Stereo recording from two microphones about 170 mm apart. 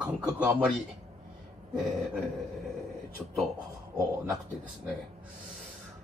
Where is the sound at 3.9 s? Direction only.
20° right (ahead or behind).